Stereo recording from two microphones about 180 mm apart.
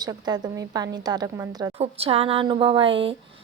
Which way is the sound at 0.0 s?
20° right (ahead or behind).